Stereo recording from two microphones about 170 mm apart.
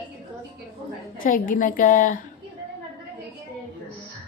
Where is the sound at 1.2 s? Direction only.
55° left (ahead or behind).